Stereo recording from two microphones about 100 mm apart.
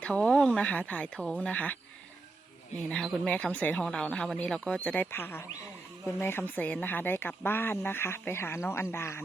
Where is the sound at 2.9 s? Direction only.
10° left (ahead or behind).